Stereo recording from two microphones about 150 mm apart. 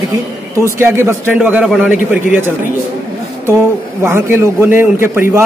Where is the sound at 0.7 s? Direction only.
15° right (ahead or behind).